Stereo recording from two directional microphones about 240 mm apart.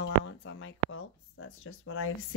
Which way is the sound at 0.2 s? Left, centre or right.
Left.